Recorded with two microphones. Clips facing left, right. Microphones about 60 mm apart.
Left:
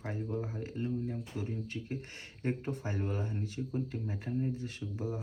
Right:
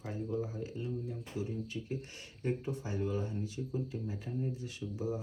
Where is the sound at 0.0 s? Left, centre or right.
Left.